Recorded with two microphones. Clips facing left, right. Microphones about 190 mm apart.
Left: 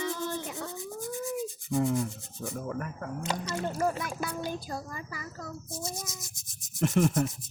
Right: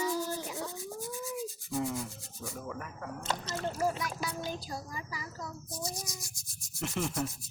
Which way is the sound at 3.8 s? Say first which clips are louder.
Left 2 dB; 55° left (ahead or behind).